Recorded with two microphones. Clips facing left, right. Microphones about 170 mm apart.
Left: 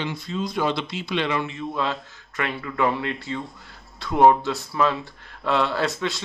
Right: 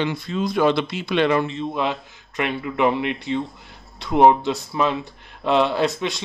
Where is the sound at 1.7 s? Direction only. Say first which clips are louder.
Right 3 dB; 20° right (ahead or behind).